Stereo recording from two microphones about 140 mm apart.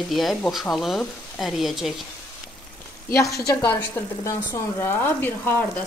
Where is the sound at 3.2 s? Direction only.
20° left (ahead or behind).